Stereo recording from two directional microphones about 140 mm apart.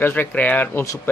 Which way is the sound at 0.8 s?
25° left (ahead or behind).